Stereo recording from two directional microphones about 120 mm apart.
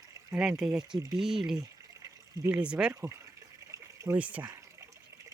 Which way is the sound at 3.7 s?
25° right (ahead or behind).